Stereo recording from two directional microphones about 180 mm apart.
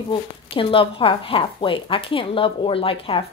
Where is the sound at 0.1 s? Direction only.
30° left (ahead or behind).